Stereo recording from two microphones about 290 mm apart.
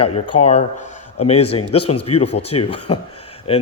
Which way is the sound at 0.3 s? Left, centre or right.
Left.